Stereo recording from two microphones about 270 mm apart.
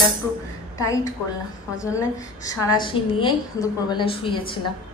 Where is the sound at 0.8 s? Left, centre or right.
Centre.